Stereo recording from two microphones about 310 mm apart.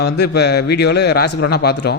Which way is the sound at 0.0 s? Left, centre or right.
Left.